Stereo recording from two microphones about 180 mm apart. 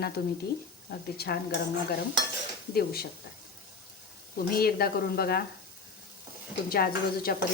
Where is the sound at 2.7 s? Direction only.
60° left (ahead or behind).